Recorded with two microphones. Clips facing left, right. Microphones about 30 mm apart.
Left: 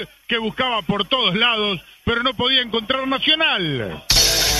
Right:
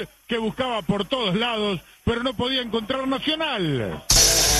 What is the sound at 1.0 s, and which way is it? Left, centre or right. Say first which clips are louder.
A man's voice: left 5 dB; left.